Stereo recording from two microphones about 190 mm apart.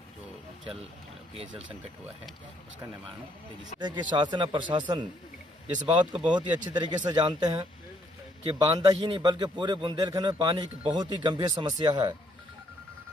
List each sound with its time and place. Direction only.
3.8 s a man's voice: 25° right (ahead or behind)
6.1 s speech: 5° right (ahead or behind)
6.5 s a man's voice: 20° right (ahead or behind)